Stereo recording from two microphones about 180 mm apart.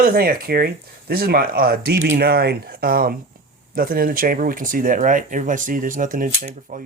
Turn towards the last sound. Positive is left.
turn(degrees=-45)  # may be behind; listen again after turning